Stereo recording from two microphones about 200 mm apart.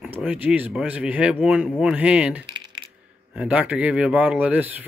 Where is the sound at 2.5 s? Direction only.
25° right (ahead or behind).